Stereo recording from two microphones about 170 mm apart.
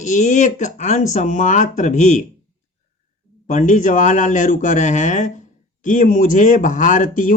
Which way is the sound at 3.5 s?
45° left (ahead or behind).